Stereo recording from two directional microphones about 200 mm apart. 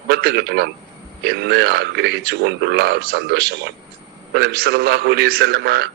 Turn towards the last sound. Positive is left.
turn(degrees=-55)  # may be behind; listen again after turning